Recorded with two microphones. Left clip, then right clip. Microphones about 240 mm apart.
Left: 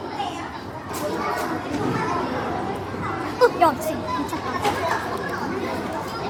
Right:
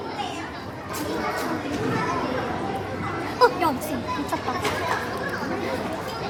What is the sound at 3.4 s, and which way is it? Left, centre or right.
Chatter, centre.